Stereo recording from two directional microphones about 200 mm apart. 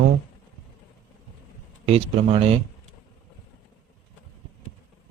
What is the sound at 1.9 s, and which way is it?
Speech, 30° right (ahead or behind).